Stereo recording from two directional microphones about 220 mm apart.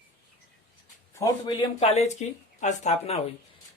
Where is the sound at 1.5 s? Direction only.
25° left (ahead or behind).